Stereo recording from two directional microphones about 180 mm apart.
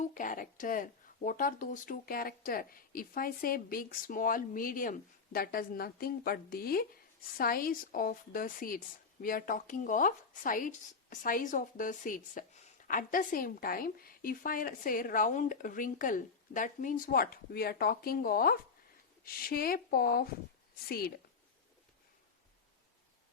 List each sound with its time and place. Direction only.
0.0 s a woman's voice: 45° left (ahead or behind)